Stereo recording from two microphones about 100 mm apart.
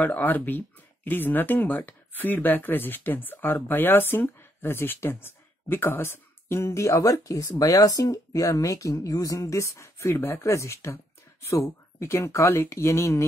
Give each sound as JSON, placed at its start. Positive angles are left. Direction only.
{"t": 0.0, "sound": "speech", "side_deg": 20}